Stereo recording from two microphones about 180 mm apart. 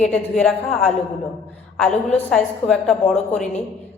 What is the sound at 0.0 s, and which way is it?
A woman's voice, 5° left (ahead or behind).